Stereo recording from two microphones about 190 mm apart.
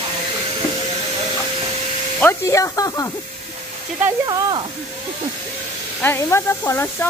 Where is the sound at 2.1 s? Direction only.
10° left (ahead or behind).